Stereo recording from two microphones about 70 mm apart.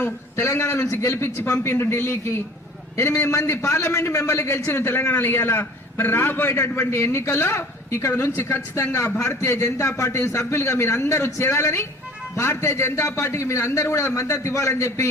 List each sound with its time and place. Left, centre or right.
0.0 s a man's voice: left